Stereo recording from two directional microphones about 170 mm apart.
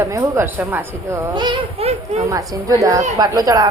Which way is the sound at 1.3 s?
25° right (ahead or behind).